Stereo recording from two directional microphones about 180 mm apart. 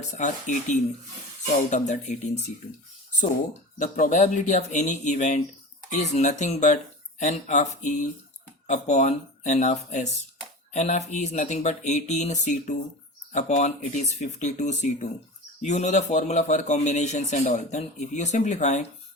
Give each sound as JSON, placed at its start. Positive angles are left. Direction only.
{"t": 0.2, "sound": "a man's voice", "side_deg": 45}
{"t": 3.8, "sound": "a man's voice", "side_deg": 40}